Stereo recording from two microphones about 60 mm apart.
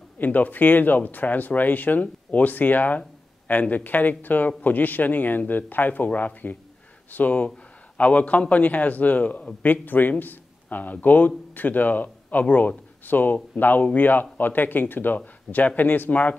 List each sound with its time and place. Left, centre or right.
0.2 s a man's voice: left